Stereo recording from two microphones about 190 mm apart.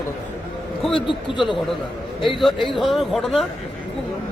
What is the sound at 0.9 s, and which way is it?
Speech, 25° left (ahead or behind).